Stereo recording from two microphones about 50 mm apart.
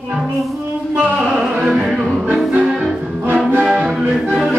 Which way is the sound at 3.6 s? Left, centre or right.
Right.